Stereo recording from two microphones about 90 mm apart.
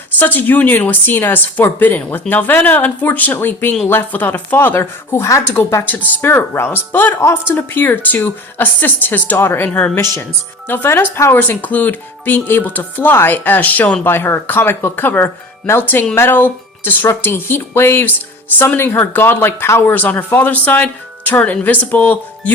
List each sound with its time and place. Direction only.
0.2 s speech: 20° left (ahead or behind)